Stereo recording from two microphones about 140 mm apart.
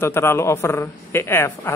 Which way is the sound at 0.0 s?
15° left (ahead or behind).